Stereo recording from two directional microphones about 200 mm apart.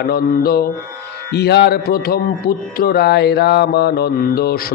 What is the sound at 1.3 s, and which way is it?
Speech, 55° left (ahead or behind).